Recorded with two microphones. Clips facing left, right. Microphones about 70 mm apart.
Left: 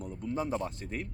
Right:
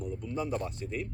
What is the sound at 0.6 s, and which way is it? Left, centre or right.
Speech, left.